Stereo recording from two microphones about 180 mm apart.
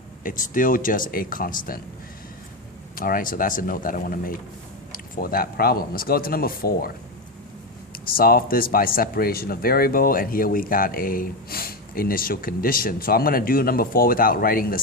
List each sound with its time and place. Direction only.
0.2 s speech: 45° left (ahead or behind)
2.9 s speech: 50° left (ahead or behind)
8.0 s speech: 55° left (ahead or behind)